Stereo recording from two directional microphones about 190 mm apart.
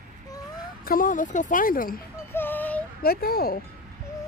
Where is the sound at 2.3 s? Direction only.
10° left (ahead or behind).